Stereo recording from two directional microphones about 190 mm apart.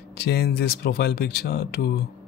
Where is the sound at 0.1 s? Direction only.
55° left (ahead or behind).